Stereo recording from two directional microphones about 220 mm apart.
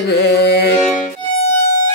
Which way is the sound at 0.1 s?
50° left (ahead or behind).